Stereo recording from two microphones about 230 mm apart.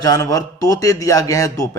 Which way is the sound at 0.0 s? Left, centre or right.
Centre.